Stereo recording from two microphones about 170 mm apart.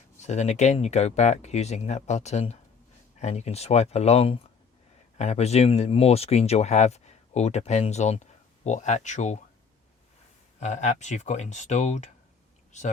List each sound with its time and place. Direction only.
0.2 s speech: 45° left (ahead or behind)
10.6 s speech: 45° left (ahead or behind)